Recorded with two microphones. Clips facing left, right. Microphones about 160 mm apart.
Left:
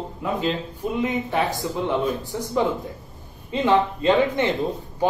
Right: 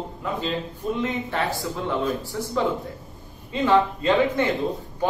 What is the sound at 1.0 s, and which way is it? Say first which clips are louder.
Speech: left 5 dB; 15° left (ahead or behind).